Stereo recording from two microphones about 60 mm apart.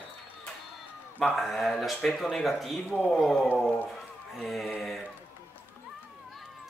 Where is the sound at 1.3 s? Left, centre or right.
Centre.